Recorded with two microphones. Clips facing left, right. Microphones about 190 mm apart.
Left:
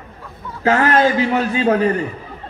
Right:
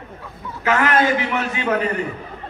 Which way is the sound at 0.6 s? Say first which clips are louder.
Left 3 dB; 35° left (ahead or behind).